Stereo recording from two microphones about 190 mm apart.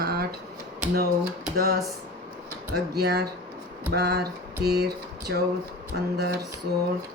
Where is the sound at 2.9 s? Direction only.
55° right (ahead or behind).